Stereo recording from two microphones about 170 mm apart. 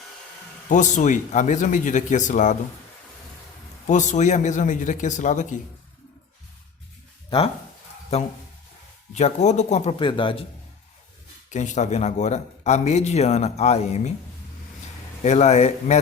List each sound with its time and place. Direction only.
0.7 s speech: 45° left (ahead or behind)
3.8 s speech: 45° left (ahead or behind)
7.3 s speech: 30° left (ahead or behind)
9.1 s speech: 45° left (ahead or behind)
10.1 s a man's voice: 30° left (ahead or behind)
11.5 s a man's voice: 45° left (ahead or behind)
15.2 s a man's voice: 40° left (ahead or behind)